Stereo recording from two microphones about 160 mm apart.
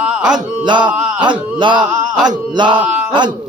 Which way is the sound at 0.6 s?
30° right (ahead or behind).